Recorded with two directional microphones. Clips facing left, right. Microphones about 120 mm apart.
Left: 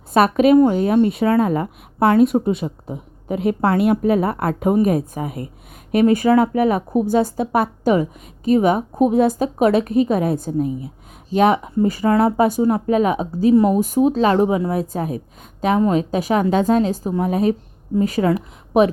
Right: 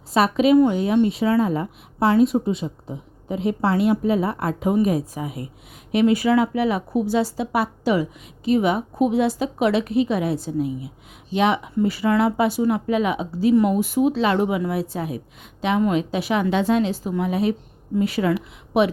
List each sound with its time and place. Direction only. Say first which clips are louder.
0.1 s a woman's voice: left 3 dB; 50° left (ahead or behind)